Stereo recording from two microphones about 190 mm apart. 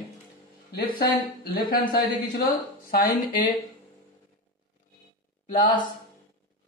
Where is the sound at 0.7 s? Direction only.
50° left (ahead or behind).